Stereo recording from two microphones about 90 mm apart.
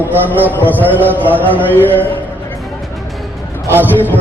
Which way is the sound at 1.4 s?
20° left (ahead or behind).